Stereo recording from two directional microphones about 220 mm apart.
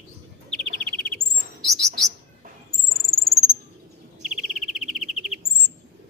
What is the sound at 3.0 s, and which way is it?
Cricket, centre (ahead or behind).